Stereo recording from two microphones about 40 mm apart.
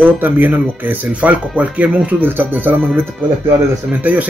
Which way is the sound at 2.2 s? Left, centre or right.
Right.